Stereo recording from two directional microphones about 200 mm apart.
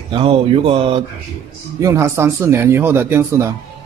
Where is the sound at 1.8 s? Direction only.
15° right (ahead or behind).